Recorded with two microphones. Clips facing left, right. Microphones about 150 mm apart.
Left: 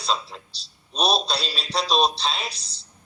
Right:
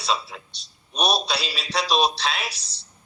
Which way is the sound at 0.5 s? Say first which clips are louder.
Even; 30° left (ahead or behind).